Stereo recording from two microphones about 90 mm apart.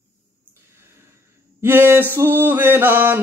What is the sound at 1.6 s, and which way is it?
Mantra, 25° right (ahead or behind).